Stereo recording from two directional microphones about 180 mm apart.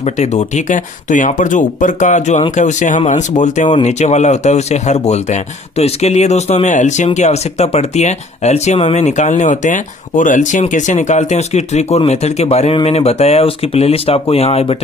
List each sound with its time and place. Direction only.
0.2 s speech: 40° left (ahead or behind)